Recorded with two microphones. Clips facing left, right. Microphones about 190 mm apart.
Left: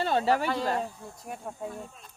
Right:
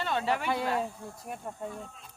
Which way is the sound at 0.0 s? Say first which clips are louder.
Left 5 dB; 35° left (ahead or behind).